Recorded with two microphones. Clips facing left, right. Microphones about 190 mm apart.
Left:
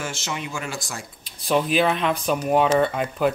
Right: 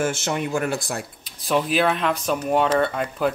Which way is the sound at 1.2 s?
Centre (ahead or behind).